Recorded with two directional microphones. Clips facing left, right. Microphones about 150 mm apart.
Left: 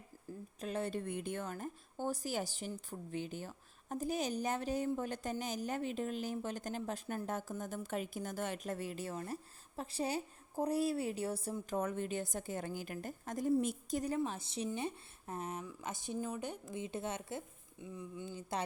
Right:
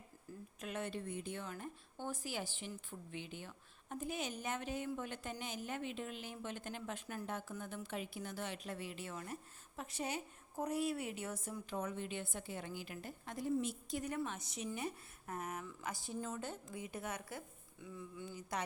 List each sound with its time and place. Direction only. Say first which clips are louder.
0.3 s a sound: left 4 dB; 30° left (ahead or behind)
0.6 s a woman's voice: left 5 dB; 35° left (ahead or behind)
0.9 s a woman's voice: left 4 dB; 60° left (ahead or behind); by 11.8 s 35° left (ahead or behind)
11.8 s a woman's voice: left 5 dB; 50° left (ahead or behind)
14.3 s a woman's voice: left 4 dB; 30° left (ahead or behind)
16.7 s a woman's voice: left 6 dB; 25° left (ahead or behind)